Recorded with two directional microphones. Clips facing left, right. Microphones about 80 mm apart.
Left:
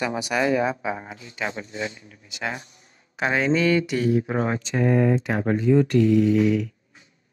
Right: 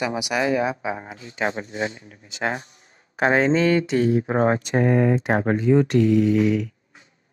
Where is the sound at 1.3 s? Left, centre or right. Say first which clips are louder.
Right 5 dB; right.